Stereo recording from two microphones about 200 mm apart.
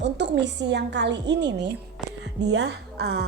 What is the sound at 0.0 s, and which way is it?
A woman's voice, 60° right (ahead or behind).